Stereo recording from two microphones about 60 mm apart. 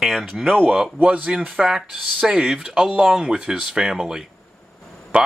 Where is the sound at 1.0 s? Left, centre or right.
Right.